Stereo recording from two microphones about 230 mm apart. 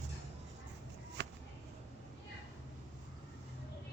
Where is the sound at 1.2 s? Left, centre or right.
Right.